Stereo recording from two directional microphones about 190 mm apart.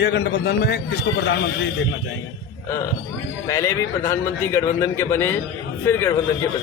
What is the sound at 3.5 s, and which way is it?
A man's voice, 15° left (ahead or behind).